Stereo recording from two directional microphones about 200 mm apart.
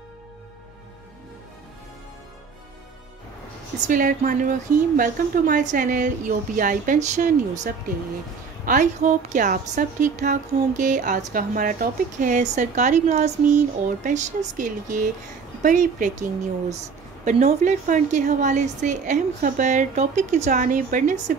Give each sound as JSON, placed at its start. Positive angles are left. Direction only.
{"t": 3.8, "sound": "a woman's voice", "side_deg": -40}